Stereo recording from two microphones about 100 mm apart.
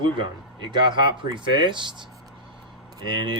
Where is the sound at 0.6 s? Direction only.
50° right (ahead or behind).